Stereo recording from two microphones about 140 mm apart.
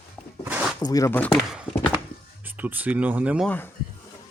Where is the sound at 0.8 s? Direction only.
25° left (ahead or behind).